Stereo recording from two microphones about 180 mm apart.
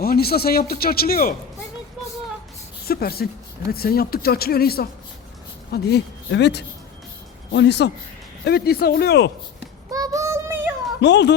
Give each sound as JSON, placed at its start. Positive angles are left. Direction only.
{"t": 0.0, "sound": "a man's voice", "side_deg": 60}
{"t": 2.8, "sound": "a man's voice", "side_deg": 60}
{"t": 5.7, "sound": "speech", "side_deg": 70}
{"t": 8.4, "sound": "a man's voice", "side_deg": 60}
{"t": 9.9, "sound": "child singing", "side_deg": -20}
{"t": 11.0, "sound": "speech", "side_deg": 75}